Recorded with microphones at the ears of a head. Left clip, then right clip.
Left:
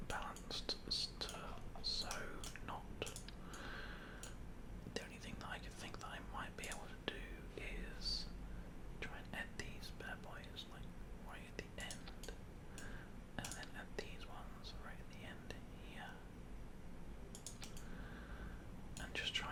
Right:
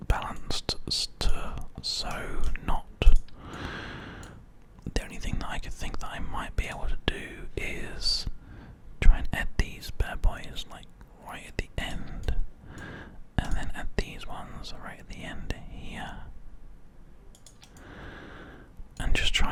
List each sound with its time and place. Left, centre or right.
0.0 s whispering: right
17.8 s whispering: right